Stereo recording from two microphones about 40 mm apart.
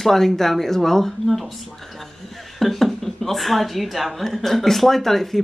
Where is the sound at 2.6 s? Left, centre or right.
Centre.